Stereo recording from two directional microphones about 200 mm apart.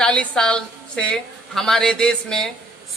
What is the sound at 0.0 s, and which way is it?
A woman's voice, 5° left (ahead or behind).